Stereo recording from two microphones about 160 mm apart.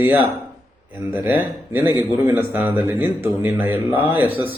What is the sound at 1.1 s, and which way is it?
Speech, 10° right (ahead or behind).